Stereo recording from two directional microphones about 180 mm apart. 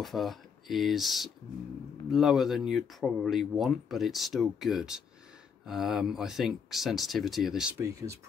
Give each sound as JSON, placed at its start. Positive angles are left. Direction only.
{"t": 0.0, "sound": "speech", "side_deg": 0}
{"t": 7.8, "sound": "speech", "side_deg": -15}